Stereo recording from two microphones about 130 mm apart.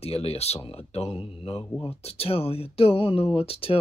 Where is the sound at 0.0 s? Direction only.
50° left (ahead or behind).